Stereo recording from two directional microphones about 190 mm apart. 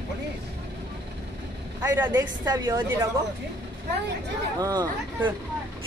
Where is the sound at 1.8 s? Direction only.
10° right (ahead or behind).